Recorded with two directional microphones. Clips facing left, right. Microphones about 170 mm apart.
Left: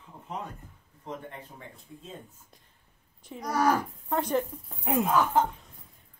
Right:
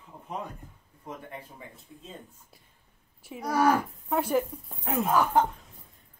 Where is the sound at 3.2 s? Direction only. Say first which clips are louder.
Right 2 dB; 10° right (ahead or behind).